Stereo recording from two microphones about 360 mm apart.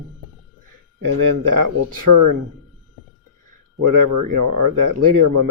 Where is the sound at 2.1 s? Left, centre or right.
Right.